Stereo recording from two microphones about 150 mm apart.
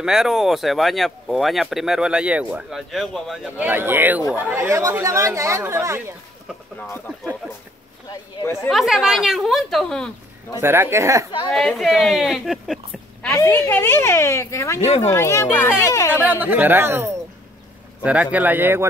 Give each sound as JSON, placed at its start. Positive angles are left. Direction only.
{"t": 0.0, "sound": "speech", "side_deg": -5}
{"t": 3.6, "sound": "speech", "side_deg": -15}
{"t": 8.1, "sound": "speech", "side_deg": 25}
{"t": 8.6, "sound": "speech", "side_deg": 0}
{"t": 10.6, "sound": "speech", "side_deg": -15}
{"t": 11.5, "sound": "speech", "side_deg": 0}
{"t": 13.3, "sound": "a woman's voice", "side_deg": 15}
{"t": 16.3, "sound": "speech", "side_deg": -10}